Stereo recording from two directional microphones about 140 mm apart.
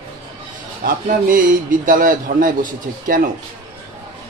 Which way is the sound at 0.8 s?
80° right.